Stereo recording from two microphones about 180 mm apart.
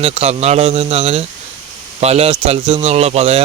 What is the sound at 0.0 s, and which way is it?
Speech, 35° right (ahead or behind).